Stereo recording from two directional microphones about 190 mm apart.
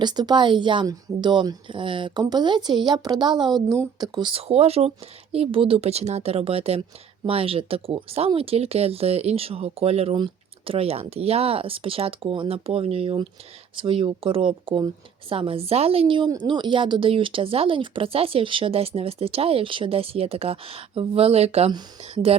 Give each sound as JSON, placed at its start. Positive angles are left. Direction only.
{"t": 0.0, "sound": "a woman's voice", "side_deg": -20}